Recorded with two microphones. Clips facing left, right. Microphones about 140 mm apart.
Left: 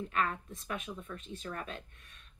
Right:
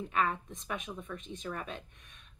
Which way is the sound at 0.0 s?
20° right (ahead or behind).